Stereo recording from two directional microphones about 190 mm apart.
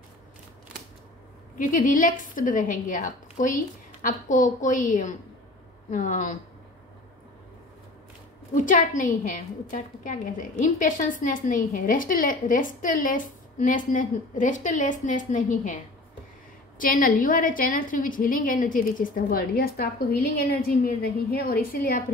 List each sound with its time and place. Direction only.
1.6 s a woman's voice: 45° left (ahead or behind)
8.5 s a woman's voice: 45° left (ahead or behind)